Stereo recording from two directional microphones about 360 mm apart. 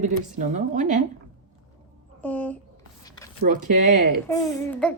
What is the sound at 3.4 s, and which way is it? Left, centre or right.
Speech, right.